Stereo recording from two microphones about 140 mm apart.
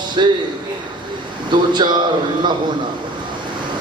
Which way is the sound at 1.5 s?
30° right (ahead or behind).